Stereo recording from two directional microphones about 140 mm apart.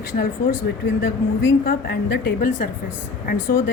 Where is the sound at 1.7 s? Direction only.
90° left.